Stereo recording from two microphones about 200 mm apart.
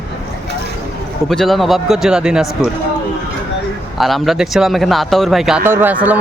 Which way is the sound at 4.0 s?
Centre (ahead or behind).